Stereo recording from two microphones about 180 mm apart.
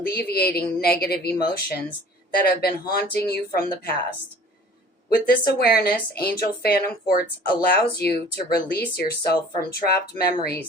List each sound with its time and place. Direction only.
0.1 s speech: 60° left (ahead or behind)
5.0 s speech: 55° left (ahead or behind)